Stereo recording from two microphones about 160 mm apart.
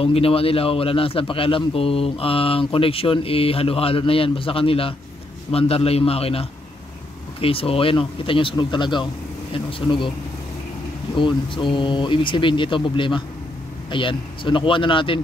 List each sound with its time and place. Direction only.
0.0 s a man's voice: 35° left (ahead or behind)
11.1 s a man's voice: 30° left (ahead or behind)